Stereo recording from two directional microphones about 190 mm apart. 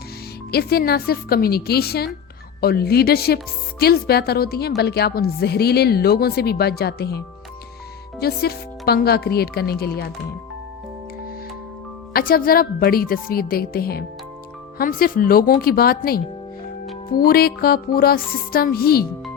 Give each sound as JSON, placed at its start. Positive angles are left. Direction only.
{"t": 0.5, "sound": "a woman's voice", "side_deg": 55}
{"t": 8.2, "sound": "a woman's voice", "side_deg": 55}
{"t": 12.1, "sound": "music", "side_deg": 50}